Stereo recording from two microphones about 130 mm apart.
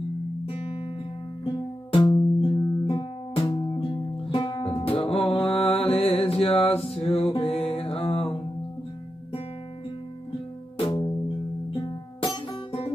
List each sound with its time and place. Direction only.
0.5 s music: 50° left (ahead or behind)
1.4 s music: 40° left (ahead or behind)
11.7 s music: 35° left (ahead or behind)